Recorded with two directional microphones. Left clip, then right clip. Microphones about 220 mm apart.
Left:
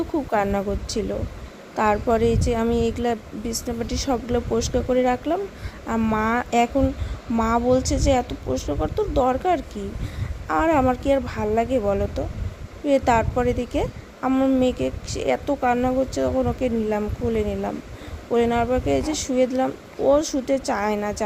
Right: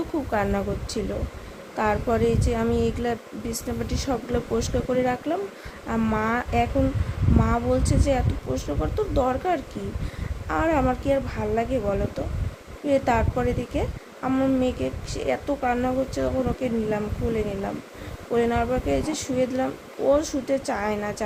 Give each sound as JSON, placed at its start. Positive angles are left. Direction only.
{"t": 0.3, "sound": "a woman's voice", "side_deg": 15}